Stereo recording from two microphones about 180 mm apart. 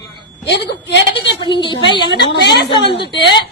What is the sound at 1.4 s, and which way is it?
A woman's voice, 25° left (ahead or behind).